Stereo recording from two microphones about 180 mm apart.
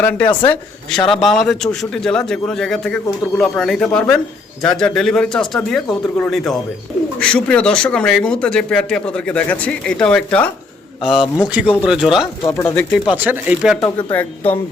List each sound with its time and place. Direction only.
0.0 s a man's voice: 10° left (ahead or behind)
12.2 s speech: 20° left (ahead or behind)
12.9 s a man's voice: 5° right (ahead or behind)
13.8 s speech: 10° left (ahead or behind)